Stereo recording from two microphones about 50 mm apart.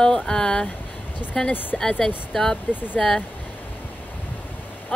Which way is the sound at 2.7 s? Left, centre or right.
Left.